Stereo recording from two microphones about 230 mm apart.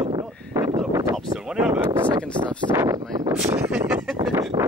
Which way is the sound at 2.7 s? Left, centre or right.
Centre.